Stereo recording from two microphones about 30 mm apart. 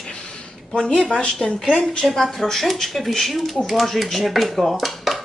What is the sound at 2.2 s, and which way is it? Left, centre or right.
Speech, centre.